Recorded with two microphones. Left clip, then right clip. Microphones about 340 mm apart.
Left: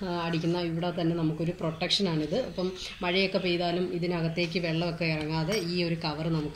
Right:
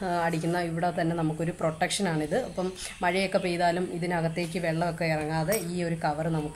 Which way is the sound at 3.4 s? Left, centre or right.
Right.